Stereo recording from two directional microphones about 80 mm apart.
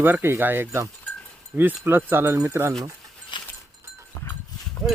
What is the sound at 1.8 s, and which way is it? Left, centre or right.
Speech, right.